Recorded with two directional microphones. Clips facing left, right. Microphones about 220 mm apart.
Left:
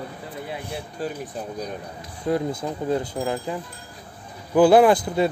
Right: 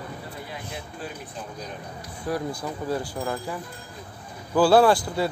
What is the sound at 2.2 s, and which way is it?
Speech, 25° left (ahead or behind).